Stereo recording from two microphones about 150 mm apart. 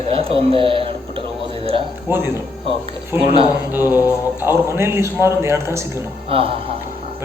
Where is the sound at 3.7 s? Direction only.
15° right (ahead or behind).